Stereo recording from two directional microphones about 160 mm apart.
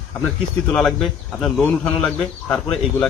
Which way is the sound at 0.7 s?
Centre (ahead or behind).